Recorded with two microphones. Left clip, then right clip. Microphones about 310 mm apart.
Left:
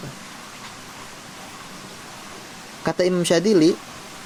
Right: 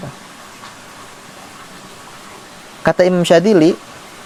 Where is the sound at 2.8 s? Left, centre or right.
Right.